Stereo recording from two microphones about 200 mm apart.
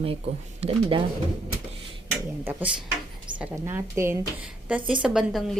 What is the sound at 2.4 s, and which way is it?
Speech, 10° right (ahead or behind).